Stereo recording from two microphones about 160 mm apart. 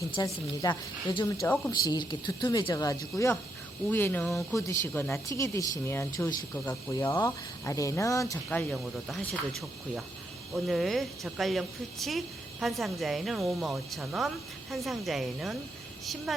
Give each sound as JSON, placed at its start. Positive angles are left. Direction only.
{"t": 0.2, "sound": "speech", "side_deg": 25}
{"t": 8.4, "sound": "speech", "side_deg": 5}